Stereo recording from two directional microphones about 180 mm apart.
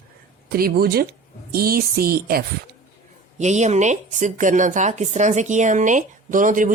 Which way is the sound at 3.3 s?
40° right (ahead or behind).